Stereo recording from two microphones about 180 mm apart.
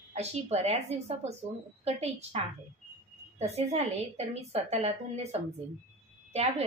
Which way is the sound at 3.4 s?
35° right (ahead or behind).